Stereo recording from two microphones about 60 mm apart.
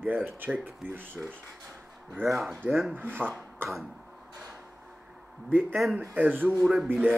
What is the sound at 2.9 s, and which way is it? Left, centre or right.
Speech, right.